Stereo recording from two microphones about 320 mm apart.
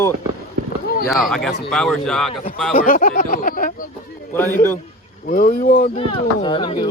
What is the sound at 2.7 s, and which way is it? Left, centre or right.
Speech, left.